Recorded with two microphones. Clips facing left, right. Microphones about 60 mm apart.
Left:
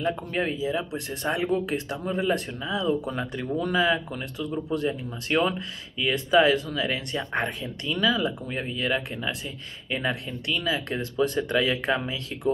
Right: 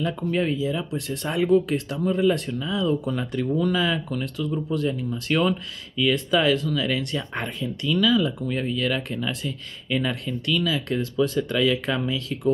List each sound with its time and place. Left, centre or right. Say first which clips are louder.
0.0 s speech: right 2 dB; left